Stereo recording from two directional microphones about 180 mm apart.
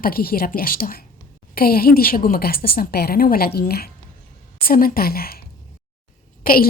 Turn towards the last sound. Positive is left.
turn(degrees=50)  # may be behind; listen again after turning